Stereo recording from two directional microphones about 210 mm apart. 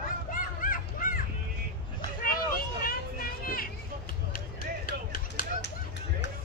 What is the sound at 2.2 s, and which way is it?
Vehicle, 45° left (ahead or behind).